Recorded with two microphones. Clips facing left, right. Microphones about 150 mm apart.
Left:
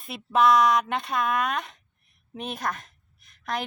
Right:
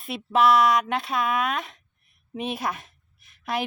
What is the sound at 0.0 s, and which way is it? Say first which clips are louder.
A woman's voice: right 1 dB; centre (ahead or behind).